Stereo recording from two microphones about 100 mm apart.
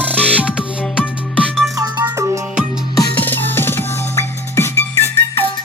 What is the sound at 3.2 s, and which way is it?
Music, 20° left (ahead or behind).